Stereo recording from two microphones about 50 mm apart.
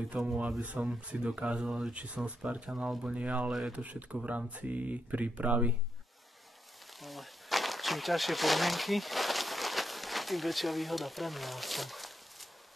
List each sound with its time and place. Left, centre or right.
0.4 s speech: right
7.0 s speech: centre